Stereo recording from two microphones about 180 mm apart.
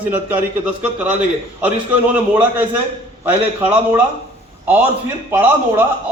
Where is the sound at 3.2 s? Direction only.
10° right (ahead or behind).